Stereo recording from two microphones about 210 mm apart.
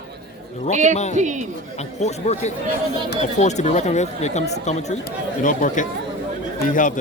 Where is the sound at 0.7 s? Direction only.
35° right (ahead or behind).